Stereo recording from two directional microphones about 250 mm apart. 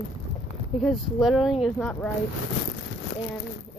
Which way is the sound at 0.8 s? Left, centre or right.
Centre.